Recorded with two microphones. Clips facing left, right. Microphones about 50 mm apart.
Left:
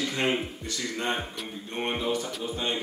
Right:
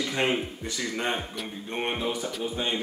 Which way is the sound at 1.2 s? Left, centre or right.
Centre.